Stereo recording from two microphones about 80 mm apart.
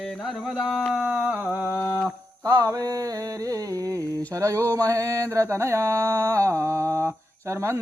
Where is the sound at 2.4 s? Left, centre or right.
Right.